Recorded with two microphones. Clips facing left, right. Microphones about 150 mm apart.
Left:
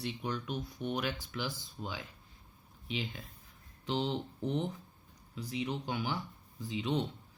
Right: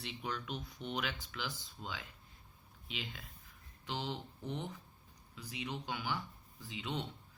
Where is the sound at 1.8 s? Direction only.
15° left (ahead or behind).